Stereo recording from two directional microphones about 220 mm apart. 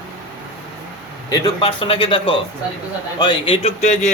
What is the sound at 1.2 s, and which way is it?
A man's voice, 20° left (ahead or behind).